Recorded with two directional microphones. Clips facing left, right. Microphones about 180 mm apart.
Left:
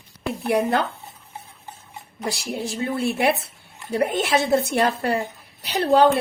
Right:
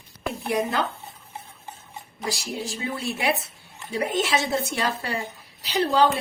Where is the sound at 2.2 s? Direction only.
55° left (ahead or behind).